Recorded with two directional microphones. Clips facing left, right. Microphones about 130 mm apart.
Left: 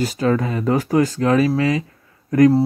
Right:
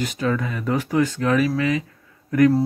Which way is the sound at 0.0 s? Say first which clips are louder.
Left 4 dB; 35° left (ahead or behind).